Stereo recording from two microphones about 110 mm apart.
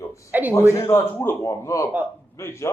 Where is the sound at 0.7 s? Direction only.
25° left (ahead or behind).